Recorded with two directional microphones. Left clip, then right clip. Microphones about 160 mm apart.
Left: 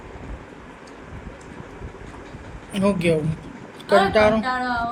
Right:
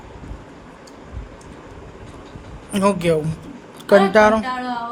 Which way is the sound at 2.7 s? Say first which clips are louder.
Right 3 dB; 40° right (ahead or behind).